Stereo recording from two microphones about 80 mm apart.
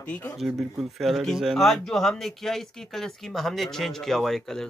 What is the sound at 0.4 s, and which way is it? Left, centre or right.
Speech, centre.